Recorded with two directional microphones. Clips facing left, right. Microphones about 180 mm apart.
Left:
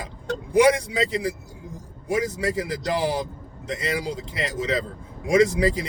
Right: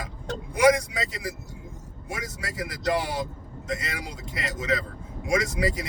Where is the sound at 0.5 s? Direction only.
30° left (ahead or behind).